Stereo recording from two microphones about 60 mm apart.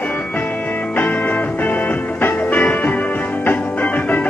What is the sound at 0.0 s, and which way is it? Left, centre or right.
Music, left.